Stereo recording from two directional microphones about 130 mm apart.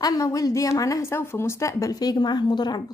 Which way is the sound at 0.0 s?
25° left (ahead or behind).